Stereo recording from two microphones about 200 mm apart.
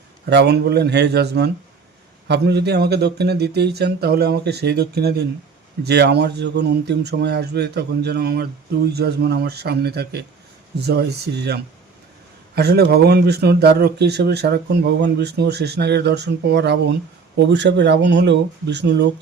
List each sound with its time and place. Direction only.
0.3 s speech: 55° right (ahead or behind)